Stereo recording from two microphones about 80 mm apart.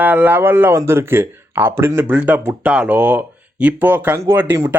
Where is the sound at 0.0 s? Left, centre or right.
Right.